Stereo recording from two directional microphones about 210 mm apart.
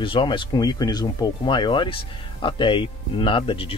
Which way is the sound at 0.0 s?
25° left (ahead or behind).